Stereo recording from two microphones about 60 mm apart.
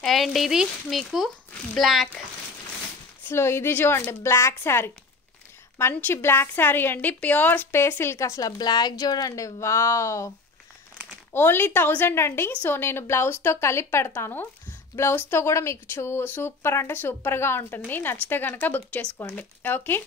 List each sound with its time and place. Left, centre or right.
0.0 s speech: centre
3.3 s speech: left
5.9 s a woman's voice: left
7.7 s a woman's voice: left
11.3 s a woman's voice: left